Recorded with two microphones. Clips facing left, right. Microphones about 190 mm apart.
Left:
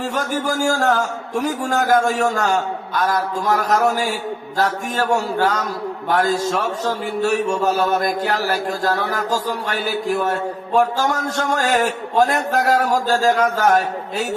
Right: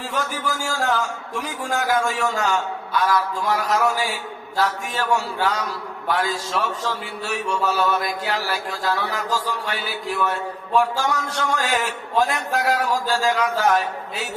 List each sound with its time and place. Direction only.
0.1 s a man's voice: 45° left (ahead or behind)